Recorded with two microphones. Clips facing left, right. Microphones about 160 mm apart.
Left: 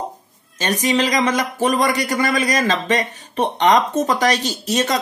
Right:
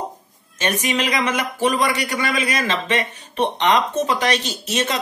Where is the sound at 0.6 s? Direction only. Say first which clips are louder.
Left 3 dB; 35° left (ahead or behind).